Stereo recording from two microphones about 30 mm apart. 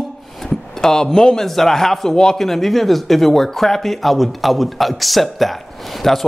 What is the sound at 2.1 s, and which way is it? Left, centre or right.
Speech, centre.